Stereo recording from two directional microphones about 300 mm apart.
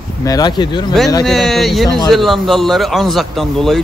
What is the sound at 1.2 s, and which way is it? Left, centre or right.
Speech, centre.